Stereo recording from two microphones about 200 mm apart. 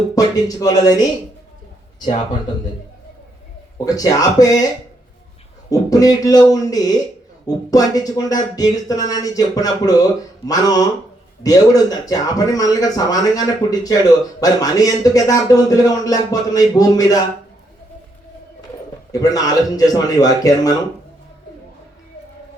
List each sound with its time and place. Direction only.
0.2 s speech: 15° left (ahead or behind)
3.8 s speech: 20° left (ahead or behind)
5.7 s speech: 20° left (ahead or behind)
19.2 s a man's voice: 15° left (ahead or behind)